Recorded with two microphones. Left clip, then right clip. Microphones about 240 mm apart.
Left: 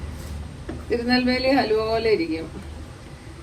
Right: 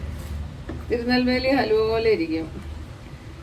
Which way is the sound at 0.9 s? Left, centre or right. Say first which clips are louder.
Even; centre.